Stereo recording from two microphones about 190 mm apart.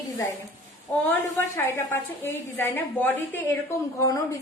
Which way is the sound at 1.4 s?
10° left (ahead or behind).